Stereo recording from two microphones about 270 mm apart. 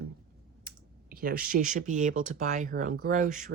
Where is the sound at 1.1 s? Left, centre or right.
Right.